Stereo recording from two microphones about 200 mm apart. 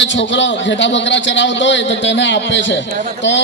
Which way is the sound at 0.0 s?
65° left (ahead or behind).